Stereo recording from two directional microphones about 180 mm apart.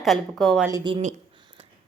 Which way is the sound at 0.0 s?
Centre (ahead or behind).